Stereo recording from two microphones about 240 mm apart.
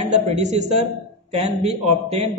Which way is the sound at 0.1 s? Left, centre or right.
Right.